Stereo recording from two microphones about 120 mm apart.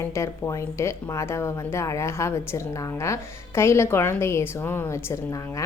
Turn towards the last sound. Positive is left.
turn(degrees=20)  # may be behind; listen again after turning